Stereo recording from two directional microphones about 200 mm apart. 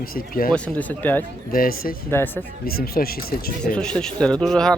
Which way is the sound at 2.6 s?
50° left (ahead or behind).